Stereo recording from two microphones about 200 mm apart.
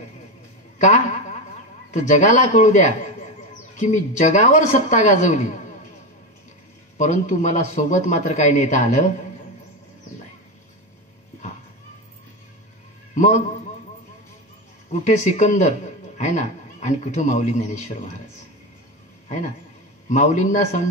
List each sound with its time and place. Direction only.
0.7 s a sound: 35° left (ahead or behind)
2.0 s speech: 35° left (ahead or behind)
7.0 s speech: 35° left (ahead or behind)
13.1 s a man's voice: 35° left (ahead or behind)
14.9 s speech: 35° left (ahead or behind)
19.2 s a man's voice: 35° left (ahead or behind)